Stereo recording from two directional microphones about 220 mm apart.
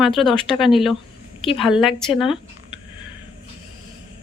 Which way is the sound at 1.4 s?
25° left (ahead or behind).